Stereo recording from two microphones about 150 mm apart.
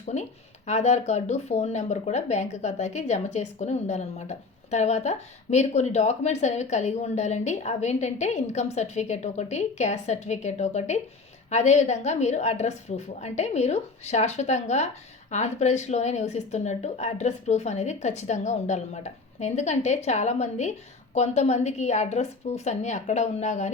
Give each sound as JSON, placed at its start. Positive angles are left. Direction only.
{"t": 0.0, "sound": "speech", "side_deg": 50}